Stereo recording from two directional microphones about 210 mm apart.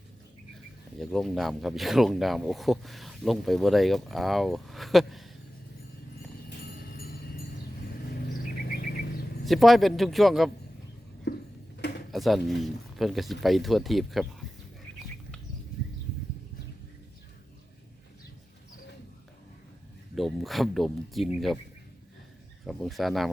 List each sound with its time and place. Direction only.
0.9 s speech: centre (ahead or behind)
6.5 s a sound: 45° left (ahead or behind)
9.4 s speech: centre (ahead or behind)
11.3 s a sound: 55° left (ahead or behind)
12.1 s speech: centre (ahead or behind)
20.1 s speech: centre (ahead or behind)
22.6 s speech: centre (ahead or behind)